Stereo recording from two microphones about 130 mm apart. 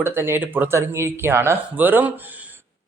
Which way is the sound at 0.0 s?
20° right (ahead or behind).